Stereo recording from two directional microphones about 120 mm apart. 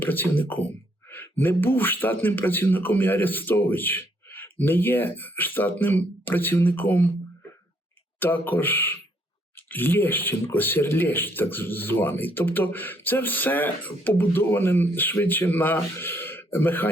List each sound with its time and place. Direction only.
0.0 s speech: 15° left (ahead or behind)
8.2 s speech: 15° left (ahead or behind)